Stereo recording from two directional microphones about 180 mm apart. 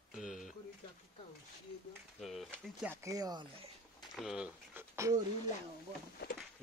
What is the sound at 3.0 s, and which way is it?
Speech, 20° right (ahead or behind).